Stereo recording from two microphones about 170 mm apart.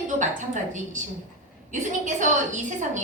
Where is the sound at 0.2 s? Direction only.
45° right (ahead or behind).